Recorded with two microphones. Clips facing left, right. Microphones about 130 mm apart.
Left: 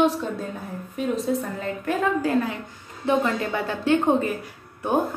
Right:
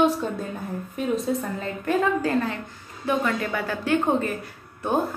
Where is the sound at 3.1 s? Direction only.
25° left (ahead or behind).